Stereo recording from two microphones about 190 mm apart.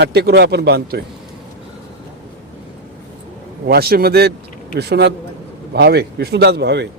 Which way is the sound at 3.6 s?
55° right (ahead or behind).